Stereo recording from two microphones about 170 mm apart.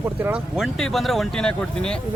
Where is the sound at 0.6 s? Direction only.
Centre (ahead or behind).